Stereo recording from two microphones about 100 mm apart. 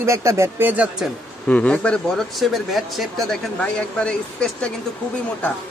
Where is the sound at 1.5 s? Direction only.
10° left (ahead or behind).